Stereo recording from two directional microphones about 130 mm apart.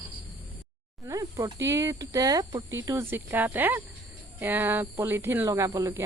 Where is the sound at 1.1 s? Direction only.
25° right (ahead or behind).